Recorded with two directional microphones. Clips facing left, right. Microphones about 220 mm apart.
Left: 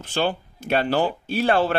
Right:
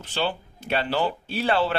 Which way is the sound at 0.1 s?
45° left (ahead or behind).